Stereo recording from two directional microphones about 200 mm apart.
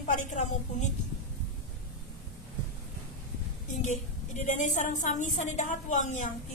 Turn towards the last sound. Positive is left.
turn(degrees=40)  # may be behind; listen again after turning